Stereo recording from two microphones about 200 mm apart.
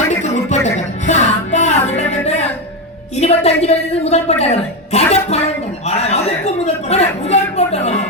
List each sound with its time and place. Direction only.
0.5 s music: 35° left (ahead or behind)
3.2 s a man's voice: 30° left (ahead or behind)